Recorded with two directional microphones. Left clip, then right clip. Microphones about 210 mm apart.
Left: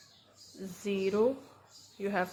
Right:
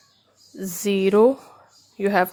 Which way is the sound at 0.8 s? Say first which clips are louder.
Right 12 dB; 50° right (ahead or behind).